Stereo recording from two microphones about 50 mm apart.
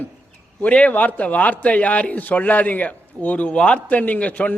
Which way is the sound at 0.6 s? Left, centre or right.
Left.